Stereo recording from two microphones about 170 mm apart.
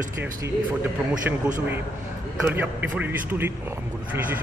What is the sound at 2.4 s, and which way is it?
Speech, 10° right (ahead or behind).